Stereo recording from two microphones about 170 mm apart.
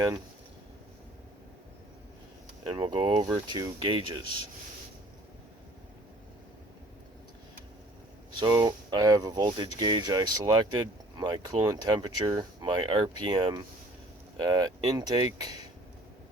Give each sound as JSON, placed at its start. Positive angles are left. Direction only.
{"t": 2.6, "sound": "speech", "side_deg": -30}
{"t": 8.4, "sound": "speech", "side_deg": -25}